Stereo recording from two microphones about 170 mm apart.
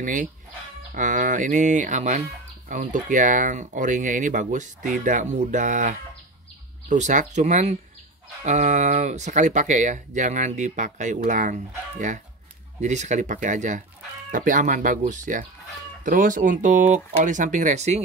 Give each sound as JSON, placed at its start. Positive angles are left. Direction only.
{"t": 0.0, "sound": "speech", "side_deg": -50}